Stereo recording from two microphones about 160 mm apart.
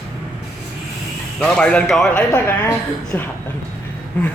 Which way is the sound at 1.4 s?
5° left (ahead or behind).